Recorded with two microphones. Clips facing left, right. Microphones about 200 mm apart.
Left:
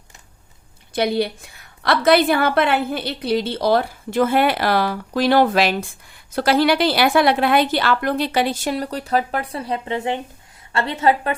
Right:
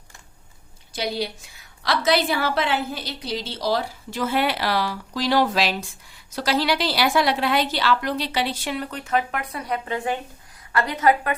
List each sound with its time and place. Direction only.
0.9 s a woman's voice: 55° left (ahead or behind); by 11.3 s 30° left (ahead or behind)